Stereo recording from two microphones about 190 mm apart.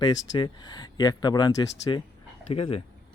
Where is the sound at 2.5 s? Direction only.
30° left (ahead or behind).